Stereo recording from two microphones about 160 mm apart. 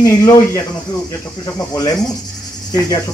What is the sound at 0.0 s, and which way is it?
Speech, 20° left (ahead or behind).